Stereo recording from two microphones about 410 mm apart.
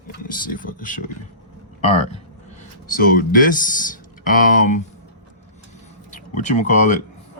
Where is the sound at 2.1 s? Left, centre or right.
Centre.